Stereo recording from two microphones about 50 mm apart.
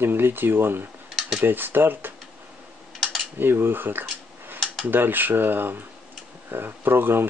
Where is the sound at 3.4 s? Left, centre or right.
Right.